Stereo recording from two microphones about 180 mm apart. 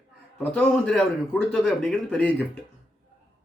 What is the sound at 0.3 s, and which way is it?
A man's voice, 5° left (ahead or behind).